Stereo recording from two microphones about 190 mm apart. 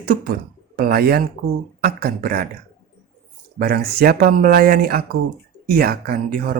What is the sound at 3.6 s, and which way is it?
Speech, 55° right (ahead or behind).